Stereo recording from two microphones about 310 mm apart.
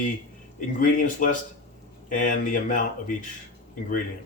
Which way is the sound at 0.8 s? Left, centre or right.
Left.